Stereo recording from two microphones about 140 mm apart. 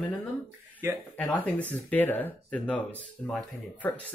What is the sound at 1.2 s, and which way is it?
Speech, 10° left (ahead or behind).